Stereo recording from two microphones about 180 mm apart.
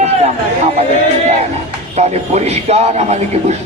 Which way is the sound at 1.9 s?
35° right (ahead or behind).